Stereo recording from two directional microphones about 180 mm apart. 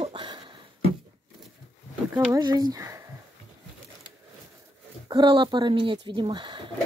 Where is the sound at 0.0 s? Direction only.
30° right (ahead or behind).